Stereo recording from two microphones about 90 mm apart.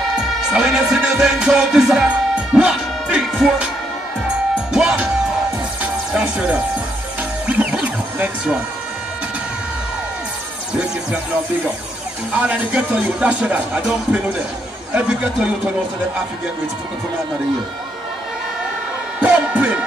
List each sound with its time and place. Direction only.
0.5 s music: 5° right (ahead or behind)
4.7 s speech: 10° right (ahead or behind)
5.8 s music: 15° right (ahead or behind)
7.4 s a sound: 15° right (ahead or behind)
10.7 s speech: 10° right (ahead or behind)
12.3 s speech: 15° right (ahead or behind)
19.2 s music: 15° right (ahead or behind)